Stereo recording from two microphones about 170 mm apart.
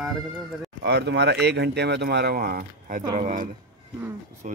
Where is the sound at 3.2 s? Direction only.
45° right (ahead or behind).